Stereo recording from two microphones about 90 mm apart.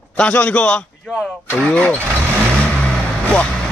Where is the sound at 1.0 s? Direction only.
5° right (ahead or behind).